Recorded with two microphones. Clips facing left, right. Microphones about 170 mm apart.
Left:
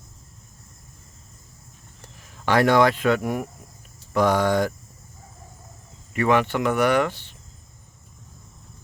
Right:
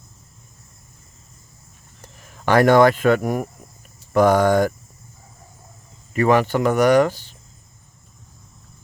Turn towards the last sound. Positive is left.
turn(degrees=-40)  # may be behind; listen again after turning